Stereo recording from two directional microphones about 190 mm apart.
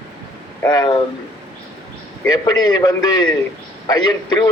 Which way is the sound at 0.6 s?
20° left (ahead or behind).